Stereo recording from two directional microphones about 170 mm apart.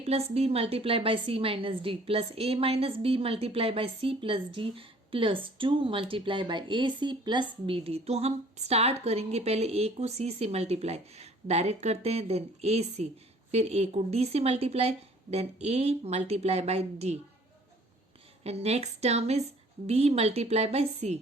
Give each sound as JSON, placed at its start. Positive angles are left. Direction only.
{"t": 0.0, "sound": "a woman's voice", "side_deg": -35}
{"t": 18.4, "sound": "a woman's voice", "side_deg": -40}